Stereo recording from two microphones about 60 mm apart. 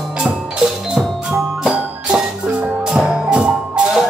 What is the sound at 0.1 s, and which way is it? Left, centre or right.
Music, centre.